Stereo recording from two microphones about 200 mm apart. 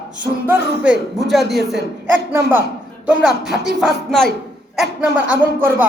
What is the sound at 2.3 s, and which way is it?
A man's voice, 10° right (ahead or behind).